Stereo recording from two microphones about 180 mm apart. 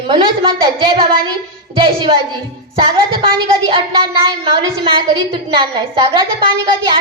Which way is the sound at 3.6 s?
25° right (ahead or behind).